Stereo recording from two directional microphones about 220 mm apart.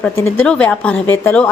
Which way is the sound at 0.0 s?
5° left (ahead or behind).